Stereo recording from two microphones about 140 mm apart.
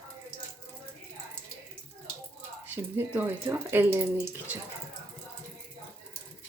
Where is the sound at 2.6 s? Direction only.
15° right (ahead or behind).